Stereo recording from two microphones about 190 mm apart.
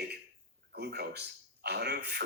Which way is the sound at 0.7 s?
60° right (ahead or behind).